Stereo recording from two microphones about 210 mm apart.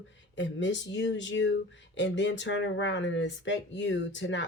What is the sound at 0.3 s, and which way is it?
Speech, 60° left (ahead or behind).